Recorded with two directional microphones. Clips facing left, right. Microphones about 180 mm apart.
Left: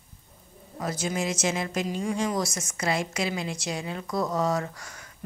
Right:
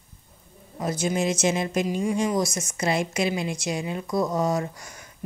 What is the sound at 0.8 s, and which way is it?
Speech, 20° right (ahead or behind).